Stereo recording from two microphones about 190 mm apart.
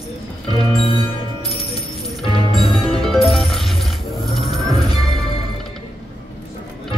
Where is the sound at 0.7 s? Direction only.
30° left (ahead or behind).